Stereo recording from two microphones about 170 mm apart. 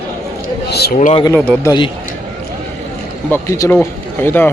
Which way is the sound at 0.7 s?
70° left (ahead or behind).